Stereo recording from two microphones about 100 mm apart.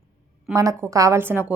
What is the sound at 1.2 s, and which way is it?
Speech, 20° right (ahead or behind).